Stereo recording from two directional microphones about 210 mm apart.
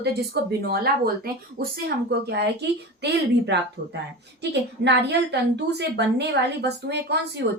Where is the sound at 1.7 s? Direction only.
50° right (ahead or behind).